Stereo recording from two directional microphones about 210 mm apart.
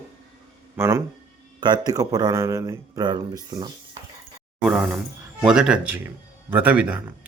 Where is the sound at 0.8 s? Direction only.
15° right (ahead or behind).